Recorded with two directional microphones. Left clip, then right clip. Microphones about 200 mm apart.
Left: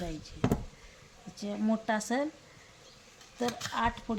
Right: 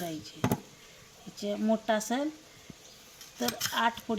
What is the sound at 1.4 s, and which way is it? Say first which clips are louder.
Speech: right 4 dB; 30° left (ahead or behind).